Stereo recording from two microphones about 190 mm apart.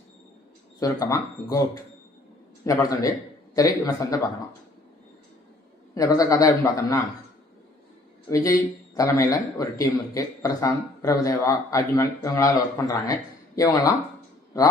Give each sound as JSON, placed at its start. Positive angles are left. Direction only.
{"t": 0.8, "sound": "a man's voice", "side_deg": 20}
{"t": 5.9, "sound": "a man's voice", "side_deg": 20}
{"t": 8.3, "sound": "a man's voice", "side_deg": 15}